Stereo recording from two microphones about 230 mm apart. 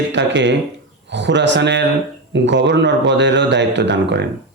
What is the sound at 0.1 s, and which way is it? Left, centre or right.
Speech, right.